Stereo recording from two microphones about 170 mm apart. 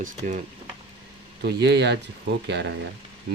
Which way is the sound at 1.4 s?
75° right (ahead or behind).